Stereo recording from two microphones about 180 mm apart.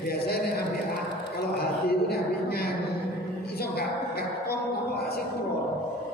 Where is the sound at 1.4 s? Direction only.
60° left (ahead or behind).